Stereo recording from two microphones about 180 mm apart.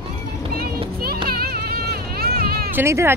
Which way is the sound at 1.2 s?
55° right (ahead or behind).